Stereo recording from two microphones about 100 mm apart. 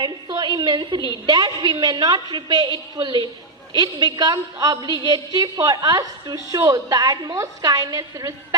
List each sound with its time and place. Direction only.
0.0 s a woman's voice: 45° right (ahead or behind)